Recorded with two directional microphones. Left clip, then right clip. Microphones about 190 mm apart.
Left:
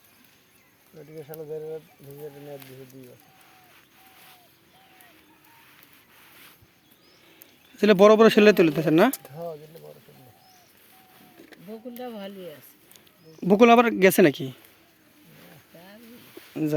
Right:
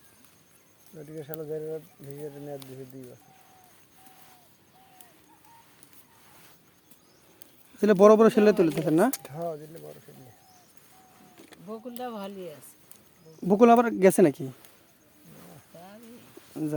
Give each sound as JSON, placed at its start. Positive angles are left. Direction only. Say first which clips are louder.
{"t": 7.8, "sound": "speech", "louder": "left 2 dB", "side_deg": 0}
{"t": 9.2, "sound": "speech", "louder": "right 2 dB", "side_deg": -50}
{"t": 11.7, "sound": "speech", "louder": "right 1 dB", "side_deg": -10}
{"t": 13.4, "sound": "speech", "louder": "left 3 dB", "side_deg": 5}